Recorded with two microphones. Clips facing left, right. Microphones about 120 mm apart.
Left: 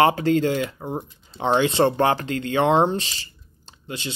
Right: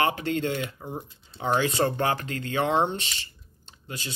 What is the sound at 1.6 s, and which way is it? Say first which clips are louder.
Speech: left 8 dB; 25° left (ahead or behind).